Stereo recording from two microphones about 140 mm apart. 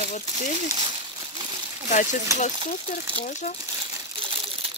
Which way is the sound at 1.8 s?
60° left (ahead or behind).